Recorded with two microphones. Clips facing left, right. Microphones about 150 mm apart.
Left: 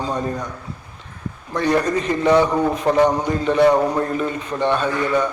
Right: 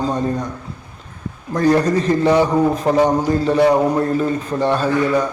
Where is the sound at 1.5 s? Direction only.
35° right (ahead or behind).